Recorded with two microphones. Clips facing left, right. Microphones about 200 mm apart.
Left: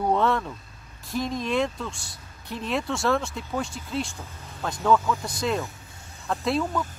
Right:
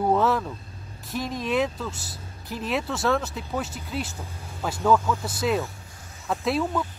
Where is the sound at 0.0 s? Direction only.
5° right (ahead or behind).